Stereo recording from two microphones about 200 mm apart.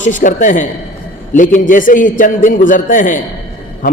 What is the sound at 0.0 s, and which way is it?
A man's voice, 40° left (ahead or behind).